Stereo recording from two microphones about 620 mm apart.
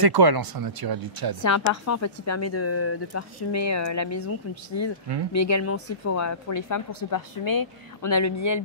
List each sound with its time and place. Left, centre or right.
0.0 s speech: right
1.4 s speech: left